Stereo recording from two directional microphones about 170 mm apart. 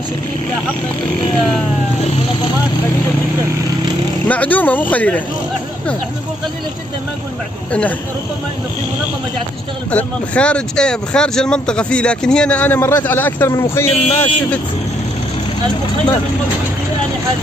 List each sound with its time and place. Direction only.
4.3 s speech: 10° left (ahead or behind)
9.8 s speech: 10° left (ahead or behind)